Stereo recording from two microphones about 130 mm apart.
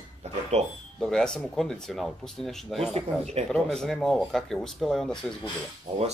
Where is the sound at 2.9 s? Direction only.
55° right (ahead or behind).